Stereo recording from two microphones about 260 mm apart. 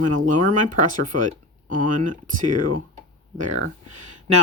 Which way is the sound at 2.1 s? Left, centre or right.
Right.